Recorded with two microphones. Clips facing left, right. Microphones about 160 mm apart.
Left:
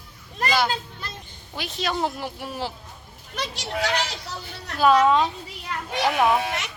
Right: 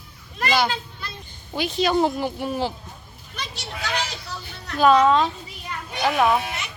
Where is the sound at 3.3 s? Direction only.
90° left.